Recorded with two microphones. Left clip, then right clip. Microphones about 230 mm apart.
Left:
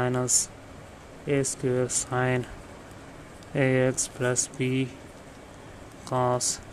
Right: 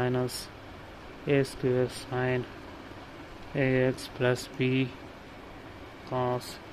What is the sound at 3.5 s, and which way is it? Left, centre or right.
Speech, centre.